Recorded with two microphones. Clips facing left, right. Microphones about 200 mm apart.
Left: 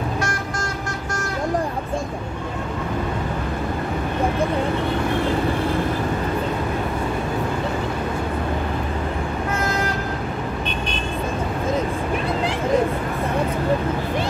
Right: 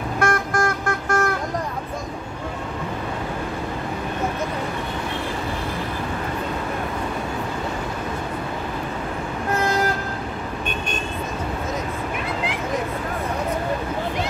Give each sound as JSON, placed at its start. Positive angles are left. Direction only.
{"t": 0.2, "sound": "vehicle", "side_deg": -55}